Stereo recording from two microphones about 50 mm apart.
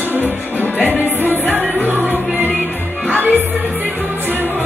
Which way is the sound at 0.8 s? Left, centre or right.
Right.